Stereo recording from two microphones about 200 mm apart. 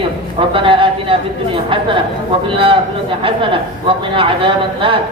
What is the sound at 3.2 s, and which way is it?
A man's voice, 25° right (ahead or behind).